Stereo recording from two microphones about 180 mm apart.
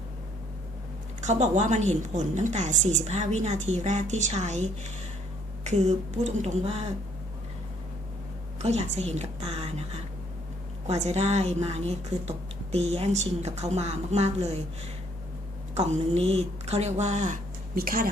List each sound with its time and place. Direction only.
1.2 s a woman's voice: 40° right (ahead or behind)
8.5 s a woman's voice: 35° right (ahead or behind)
15.7 s speech: 35° right (ahead or behind); by 18.1 s 55° right (ahead or behind)